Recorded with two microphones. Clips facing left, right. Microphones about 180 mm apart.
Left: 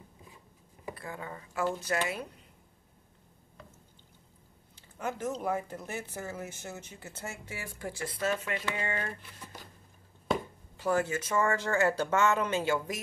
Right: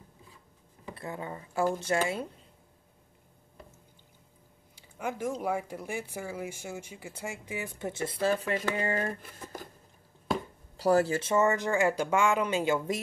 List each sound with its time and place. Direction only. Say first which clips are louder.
0.9 s speech: right 6 dB; 25° right (ahead or behind)
4.7 s speech: right 1 dB; 10° right (ahead or behind); by 9.6 s 45° right (ahead or behind)
10.8 s speech: right 5 dB; 35° right (ahead or behind)